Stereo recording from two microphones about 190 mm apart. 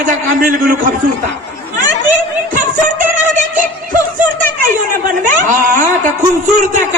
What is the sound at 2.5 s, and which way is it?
Music, 45° right (ahead or behind).